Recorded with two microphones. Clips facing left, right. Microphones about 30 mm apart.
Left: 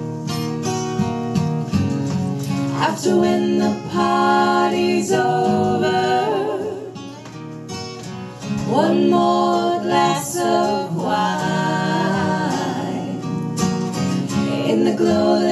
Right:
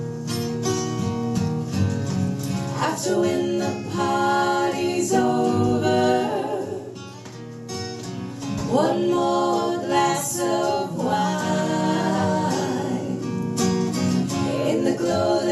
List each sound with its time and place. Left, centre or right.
0.8 s music: left
8.6 s music: left
9.8 s a capella: left
10.6 s music: centre
11.1 s music: left
12.4 s music: left